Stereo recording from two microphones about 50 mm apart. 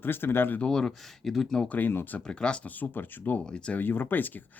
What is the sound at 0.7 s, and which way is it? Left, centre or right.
Speech, centre.